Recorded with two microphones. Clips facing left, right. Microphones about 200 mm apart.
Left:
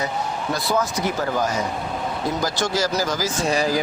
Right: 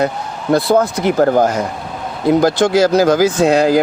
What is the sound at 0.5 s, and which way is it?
Speech, 55° right (ahead or behind).